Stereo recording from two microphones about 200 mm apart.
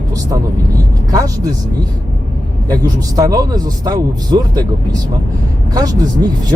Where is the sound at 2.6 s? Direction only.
20° right (ahead or behind).